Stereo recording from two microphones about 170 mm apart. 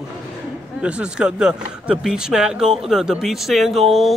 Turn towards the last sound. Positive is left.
turn(degrees=0)  # may be behind; listen again after turning